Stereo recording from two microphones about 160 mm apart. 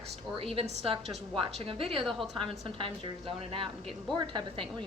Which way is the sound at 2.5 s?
35° right (ahead or behind).